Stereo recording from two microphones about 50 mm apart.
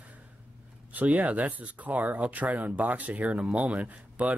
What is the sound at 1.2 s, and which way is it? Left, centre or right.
Speech, right.